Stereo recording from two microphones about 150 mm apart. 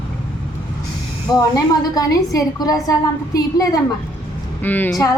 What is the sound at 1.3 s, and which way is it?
A woman's voice, 25° left (ahead or behind).